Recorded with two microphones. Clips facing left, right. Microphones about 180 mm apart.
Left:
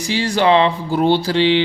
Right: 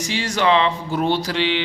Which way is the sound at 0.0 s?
35° left (ahead or behind).